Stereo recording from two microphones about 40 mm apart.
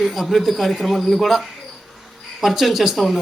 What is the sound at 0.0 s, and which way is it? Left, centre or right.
A man's voice, centre.